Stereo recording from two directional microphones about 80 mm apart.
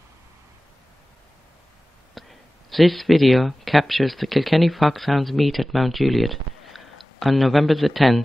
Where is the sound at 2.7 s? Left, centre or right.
Centre.